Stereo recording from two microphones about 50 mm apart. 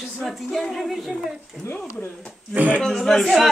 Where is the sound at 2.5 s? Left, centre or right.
Right.